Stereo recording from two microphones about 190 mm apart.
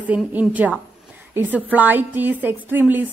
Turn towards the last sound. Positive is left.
turn(degrees=-10)  # may be behind; listen again after turning